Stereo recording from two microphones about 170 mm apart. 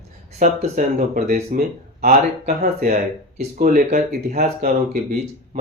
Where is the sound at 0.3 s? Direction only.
50° right (ahead or behind).